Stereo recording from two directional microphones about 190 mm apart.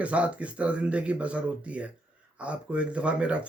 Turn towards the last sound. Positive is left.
turn(degrees=-5)  # may be behind; listen again after turning